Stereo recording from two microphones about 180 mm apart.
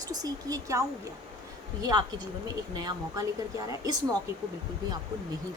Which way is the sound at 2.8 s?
20° right (ahead or behind).